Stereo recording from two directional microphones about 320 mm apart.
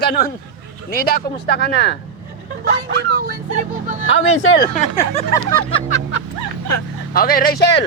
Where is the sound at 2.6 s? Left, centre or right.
Right.